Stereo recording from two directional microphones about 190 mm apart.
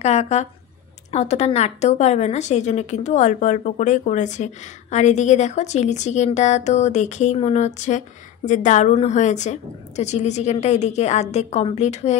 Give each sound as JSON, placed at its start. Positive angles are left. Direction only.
{"t": 0.0, "sound": "a woman's voice", "side_deg": 35}